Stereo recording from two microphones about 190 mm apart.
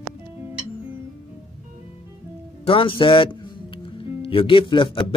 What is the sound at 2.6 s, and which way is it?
Speech, 30° left (ahead or behind).